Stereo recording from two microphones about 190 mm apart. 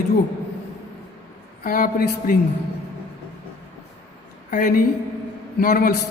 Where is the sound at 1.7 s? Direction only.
45° left (ahead or behind).